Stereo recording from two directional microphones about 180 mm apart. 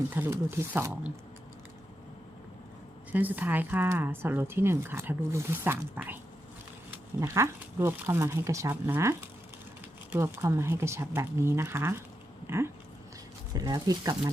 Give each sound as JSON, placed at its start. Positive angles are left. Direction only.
{"t": 0.1, "sound": "speech", "side_deg": -10}
{"t": 3.1, "sound": "speech", "side_deg": -10}
{"t": 12.5, "sound": "a sound", "side_deg": -15}
{"t": 13.5, "sound": "speech", "side_deg": -20}